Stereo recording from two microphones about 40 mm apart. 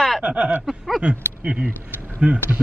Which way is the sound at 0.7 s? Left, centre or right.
Centre.